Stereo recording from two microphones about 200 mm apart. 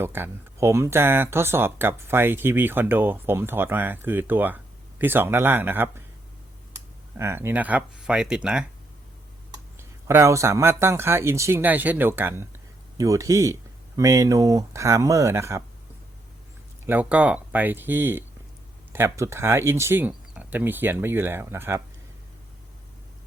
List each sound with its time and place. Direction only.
0.0 s speech: 10° right (ahead or behind)
7.2 s speech: 10° right (ahead or behind)
9.7 s speech: 15° right (ahead or behind)
16.8 s speech: 10° right (ahead or behind)